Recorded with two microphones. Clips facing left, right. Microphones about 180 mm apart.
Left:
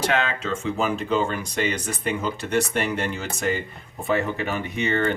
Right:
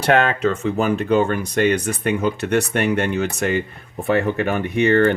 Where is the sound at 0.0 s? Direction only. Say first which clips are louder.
Right 7 dB; 60° right (ahead or behind).